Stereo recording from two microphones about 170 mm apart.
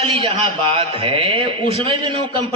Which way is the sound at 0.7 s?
35° right (ahead or behind).